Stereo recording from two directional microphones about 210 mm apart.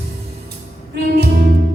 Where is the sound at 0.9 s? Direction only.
50° right (ahead or behind).